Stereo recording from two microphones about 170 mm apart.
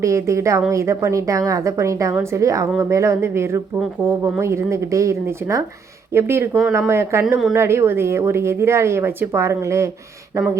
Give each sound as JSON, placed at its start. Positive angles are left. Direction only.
{"t": 0.0, "sound": "a woman's voice", "side_deg": -15}